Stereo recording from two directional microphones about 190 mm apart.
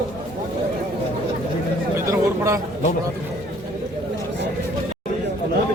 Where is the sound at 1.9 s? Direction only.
15° right (ahead or behind).